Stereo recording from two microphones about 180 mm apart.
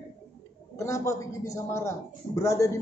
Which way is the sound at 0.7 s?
15° left (ahead or behind).